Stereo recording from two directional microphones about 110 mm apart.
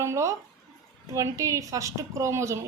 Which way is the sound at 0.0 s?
25° right (ahead or behind).